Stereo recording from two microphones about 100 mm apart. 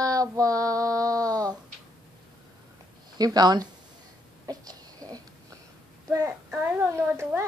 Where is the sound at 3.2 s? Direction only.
40° right (ahead or behind).